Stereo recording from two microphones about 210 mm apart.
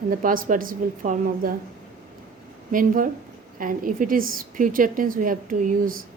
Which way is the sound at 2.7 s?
40° right (ahead or behind).